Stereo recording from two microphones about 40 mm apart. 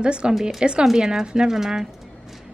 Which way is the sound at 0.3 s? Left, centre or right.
Centre.